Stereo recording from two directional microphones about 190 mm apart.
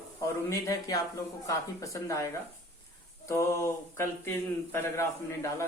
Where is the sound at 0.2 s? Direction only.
15° left (ahead or behind).